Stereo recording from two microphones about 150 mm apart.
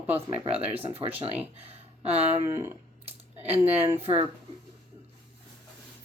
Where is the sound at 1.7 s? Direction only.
45° right (ahead or behind).